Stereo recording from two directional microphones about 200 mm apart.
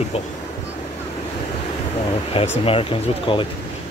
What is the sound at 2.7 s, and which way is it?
Speech, 25° left (ahead or behind).